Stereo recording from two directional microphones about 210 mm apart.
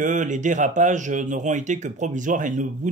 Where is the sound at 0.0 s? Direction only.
40° right (ahead or behind).